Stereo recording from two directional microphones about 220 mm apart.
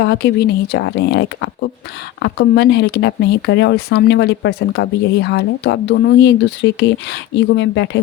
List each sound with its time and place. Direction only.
0.0 s speech: 50° left (ahead or behind)